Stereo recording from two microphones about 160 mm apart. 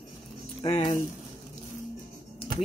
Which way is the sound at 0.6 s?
35° left (ahead or behind).